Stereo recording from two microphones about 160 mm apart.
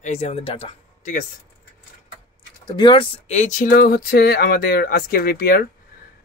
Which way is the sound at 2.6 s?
30° left (ahead or behind).